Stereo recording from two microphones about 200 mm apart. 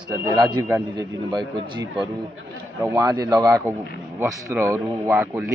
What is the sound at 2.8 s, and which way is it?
Speech, 15° right (ahead or behind).